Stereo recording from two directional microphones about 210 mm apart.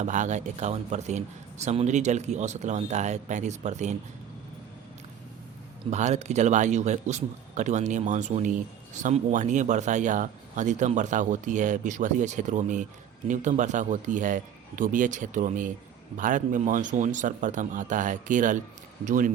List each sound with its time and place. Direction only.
0.0 s a man's voice: 35° right (ahead or behind)
5.9 s a man's voice: 35° right (ahead or behind)